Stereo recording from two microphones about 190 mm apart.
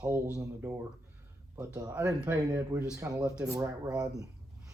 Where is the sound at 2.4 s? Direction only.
15° right (ahead or behind).